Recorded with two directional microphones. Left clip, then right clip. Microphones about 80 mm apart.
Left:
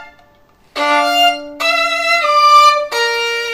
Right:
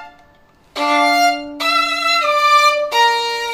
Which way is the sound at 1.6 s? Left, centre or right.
Left.